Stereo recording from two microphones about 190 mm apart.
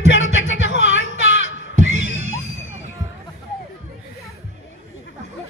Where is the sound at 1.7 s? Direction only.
40° right (ahead or behind).